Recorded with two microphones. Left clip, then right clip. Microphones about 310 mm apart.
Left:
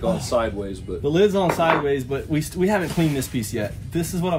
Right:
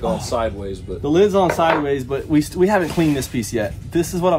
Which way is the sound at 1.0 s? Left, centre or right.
Centre.